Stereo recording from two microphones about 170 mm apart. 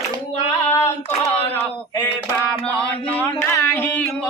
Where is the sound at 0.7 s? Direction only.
15° left (ahead or behind).